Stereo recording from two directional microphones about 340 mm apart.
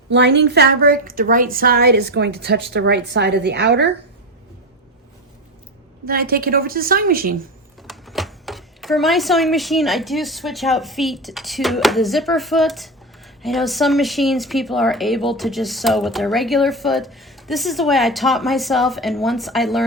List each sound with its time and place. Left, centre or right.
0.1 s a woman's voice: right
6.1 s a woman's voice: right
7.8 s speech: centre